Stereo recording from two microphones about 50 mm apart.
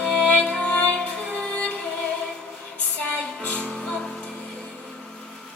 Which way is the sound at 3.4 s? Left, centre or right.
Left.